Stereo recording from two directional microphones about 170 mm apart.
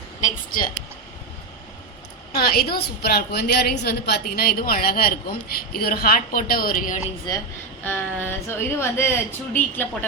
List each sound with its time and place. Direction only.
0.2 s a sound: 50° left (ahead or behind)
2.3 s a woman's voice: 65° left (ahead or behind)
7.9 s speech: 15° left (ahead or behind)